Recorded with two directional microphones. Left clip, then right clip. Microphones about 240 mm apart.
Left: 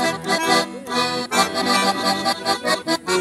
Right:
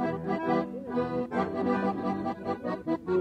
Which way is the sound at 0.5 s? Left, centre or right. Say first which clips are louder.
Left 10 dB; left.